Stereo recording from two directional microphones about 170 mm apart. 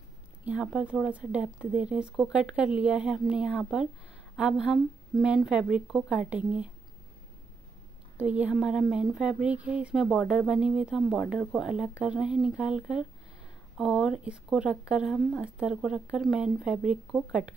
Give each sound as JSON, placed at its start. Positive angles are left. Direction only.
{"t": 0.5, "sound": "speech", "side_deg": -5}
{"t": 8.2, "sound": "speech", "side_deg": -5}